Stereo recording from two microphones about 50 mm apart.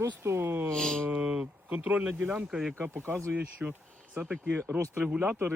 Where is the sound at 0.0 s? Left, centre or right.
Right.